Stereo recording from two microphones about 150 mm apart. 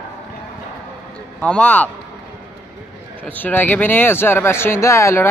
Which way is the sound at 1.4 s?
10° left (ahead or behind).